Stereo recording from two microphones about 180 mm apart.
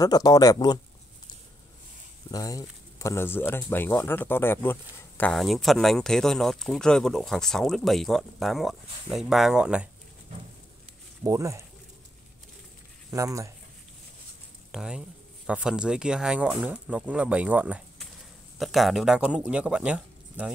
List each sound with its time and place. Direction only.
0.0 s speech: 20° left (ahead or behind)
2.3 s speech: 20° left (ahead or behind); by 9.8 s 5° right (ahead or behind)
11.2 s speech: 15° right (ahead or behind)
13.1 s speech: 15° right (ahead or behind)
14.7 s speech: 5° right (ahead or behind)